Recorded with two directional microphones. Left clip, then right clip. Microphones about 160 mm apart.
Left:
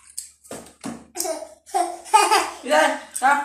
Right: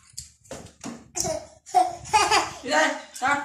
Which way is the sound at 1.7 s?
60° right (ahead or behind).